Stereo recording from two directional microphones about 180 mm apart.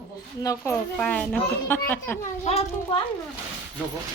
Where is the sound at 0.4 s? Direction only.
15° left (ahead or behind).